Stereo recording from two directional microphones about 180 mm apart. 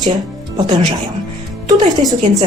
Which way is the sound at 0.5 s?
25° right (ahead or behind).